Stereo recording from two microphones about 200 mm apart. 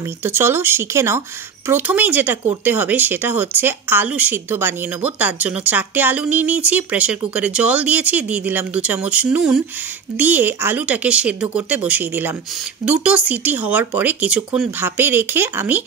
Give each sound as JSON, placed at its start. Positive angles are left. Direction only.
{"t": 0.0, "sound": "speech", "side_deg": -10}